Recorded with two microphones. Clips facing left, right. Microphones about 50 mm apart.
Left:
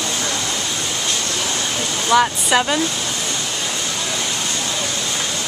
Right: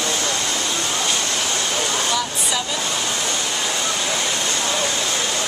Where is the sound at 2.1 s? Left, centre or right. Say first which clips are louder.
Left 8 dB; left.